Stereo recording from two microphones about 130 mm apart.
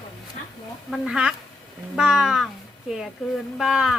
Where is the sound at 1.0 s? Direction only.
5° right (ahead or behind).